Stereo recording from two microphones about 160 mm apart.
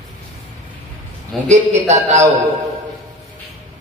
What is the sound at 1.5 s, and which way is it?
Speech, 45° right (ahead or behind).